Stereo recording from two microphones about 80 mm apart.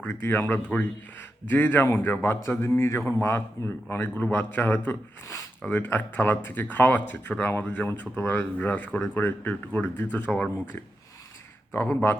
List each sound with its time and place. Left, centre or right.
0.1 s a man's voice: left
11.7 s speech: left